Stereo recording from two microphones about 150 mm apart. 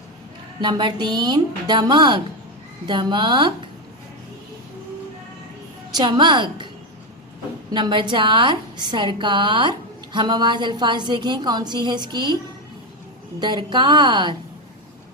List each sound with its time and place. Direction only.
0.6 s a woman's voice: 30° right (ahead or behind)
5.9 s a woman's voice: 30° right (ahead or behind)
7.7 s a woman's voice: 30° right (ahead or behind)
13.4 s a woman's voice: 30° right (ahead or behind)